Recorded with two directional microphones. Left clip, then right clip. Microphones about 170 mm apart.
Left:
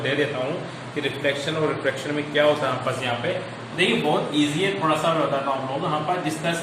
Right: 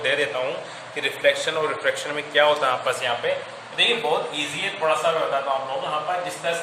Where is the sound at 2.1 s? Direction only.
65° right (ahead or behind).